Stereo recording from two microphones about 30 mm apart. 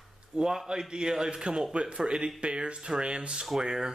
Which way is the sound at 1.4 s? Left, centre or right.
Right.